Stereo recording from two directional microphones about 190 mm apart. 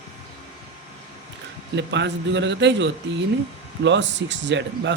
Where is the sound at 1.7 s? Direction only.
70° right (ahead or behind).